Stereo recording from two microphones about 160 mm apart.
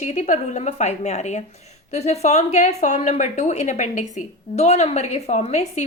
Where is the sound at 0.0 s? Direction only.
45° left (ahead or behind).